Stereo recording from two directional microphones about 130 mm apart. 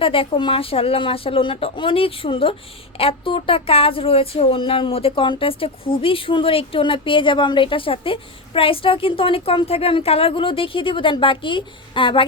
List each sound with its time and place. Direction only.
0.0 s speech: 45° left (ahead or behind)